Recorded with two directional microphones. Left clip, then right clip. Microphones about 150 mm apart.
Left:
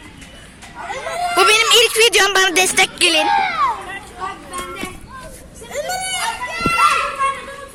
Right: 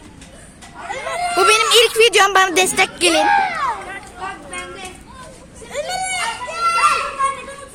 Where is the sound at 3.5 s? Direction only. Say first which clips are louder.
Left 3 dB; 5° left (ahead or behind).